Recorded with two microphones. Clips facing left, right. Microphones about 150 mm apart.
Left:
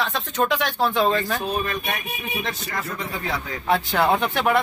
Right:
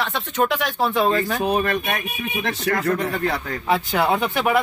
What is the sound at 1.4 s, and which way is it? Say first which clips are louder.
Speech: right 5 dB; 65° right (ahead or behind).